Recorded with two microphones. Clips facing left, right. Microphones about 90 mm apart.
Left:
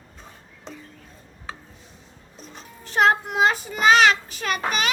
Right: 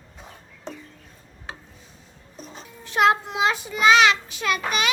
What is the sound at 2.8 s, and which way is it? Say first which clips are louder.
Child singing: even; 40° left (ahead or behind).